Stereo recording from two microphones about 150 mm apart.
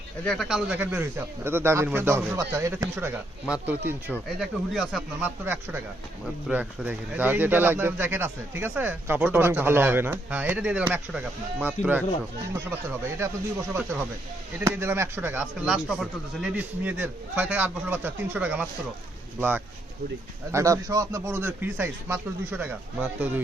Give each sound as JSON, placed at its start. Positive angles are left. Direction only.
{"t": 0.3, "sound": "speech", "side_deg": 0}
{"t": 5.2, "sound": "speech", "side_deg": -15}
{"t": 12.5, "sound": "speech", "side_deg": -20}